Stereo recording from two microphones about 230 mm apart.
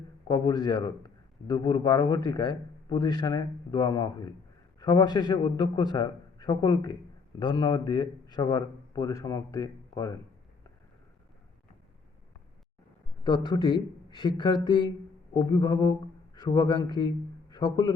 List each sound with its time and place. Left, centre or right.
0.3 s a man's voice: centre
13.2 s a man's voice: centre